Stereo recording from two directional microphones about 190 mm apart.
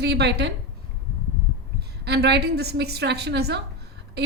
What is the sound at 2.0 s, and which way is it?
A woman's voice, 60° right (ahead or behind).